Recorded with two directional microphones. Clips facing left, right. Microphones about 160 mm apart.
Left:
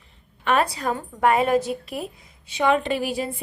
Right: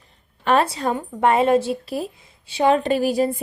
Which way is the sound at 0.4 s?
30° right (ahead or behind).